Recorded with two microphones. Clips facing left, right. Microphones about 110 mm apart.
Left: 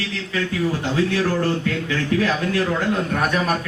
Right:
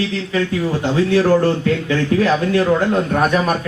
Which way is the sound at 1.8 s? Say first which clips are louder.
Right 4 dB; 35° right (ahead or behind).